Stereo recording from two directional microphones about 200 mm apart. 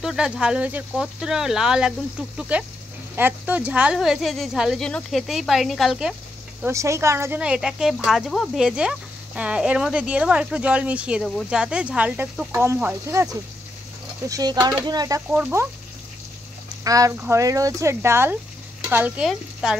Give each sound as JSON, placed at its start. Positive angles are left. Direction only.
{"t": 0.0, "sound": "speech", "side_deg": -5}
{"t": 6.6, "sound": "speech", "side_deg": -15}
{"t": 16.8, "sound": "speech", "side_deg": -15}